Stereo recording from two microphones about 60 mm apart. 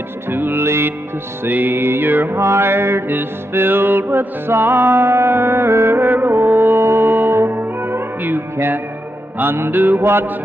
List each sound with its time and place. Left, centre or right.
0.3 s music: right
1.4 s music: right
2.3 s music: right